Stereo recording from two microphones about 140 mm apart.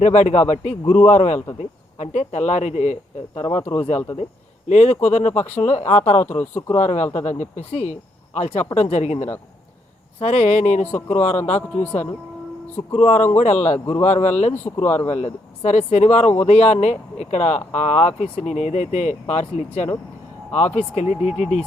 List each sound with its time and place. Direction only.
0.0 s speech: 55° left (ahead or behind)
3.5 s speech: 15° left (ahead or behind)
4.7 s speech: 55° left (ahead or behind)
6.2 s speech: 15° left (ahead or behind)
6.7 s speech: 55° left (ahead or behind)
12.9 s speech: 55° left (ahead or behind)
13.7 s speech: 15° left (ahead or behind)
14.0 s speech: 55° left (ahead or behind)
14.8 s speech: 15° left (ahead or behind)
15.1 s speech: 55° left (ahead or behind)